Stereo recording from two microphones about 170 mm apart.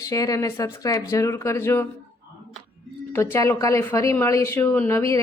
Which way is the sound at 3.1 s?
15° left (ahead or behind).